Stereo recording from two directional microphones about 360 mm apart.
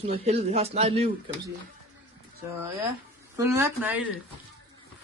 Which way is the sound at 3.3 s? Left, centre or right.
Centre.